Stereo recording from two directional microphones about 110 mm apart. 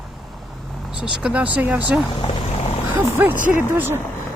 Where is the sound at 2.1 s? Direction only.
60° left (ahead or behind).